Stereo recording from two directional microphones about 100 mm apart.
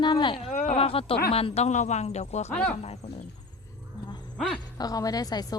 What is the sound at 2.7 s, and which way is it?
Speech, 90° left.